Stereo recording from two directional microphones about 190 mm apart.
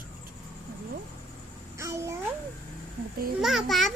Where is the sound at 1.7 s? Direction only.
15° right (ahead or behind).